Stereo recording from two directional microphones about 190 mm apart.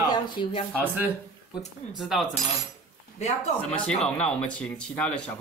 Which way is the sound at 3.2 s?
35° left (ahead or behind).